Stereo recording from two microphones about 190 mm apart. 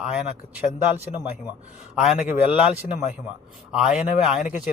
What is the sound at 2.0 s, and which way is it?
Speech, 5° right (ahead or behind).